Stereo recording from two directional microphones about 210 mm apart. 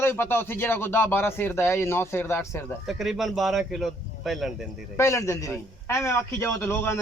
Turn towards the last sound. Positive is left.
turn(degrees=10)  # may be behind; listen again after turning